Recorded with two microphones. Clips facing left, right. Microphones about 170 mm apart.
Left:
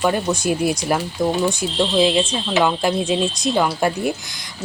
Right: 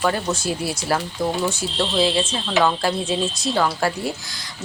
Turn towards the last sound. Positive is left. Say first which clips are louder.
# left 4 dB
turn(degrees=20)  # may be behind; listen again after turning